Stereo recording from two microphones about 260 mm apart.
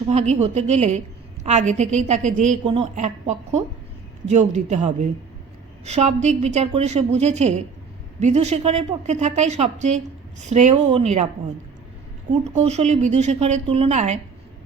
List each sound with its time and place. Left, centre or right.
0.1 s a woman's voice: right
12.5 s a woman's voice: right